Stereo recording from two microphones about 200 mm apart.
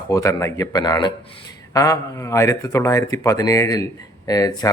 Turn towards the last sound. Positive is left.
turn(degrees=20)  # may be behind; listen again after turning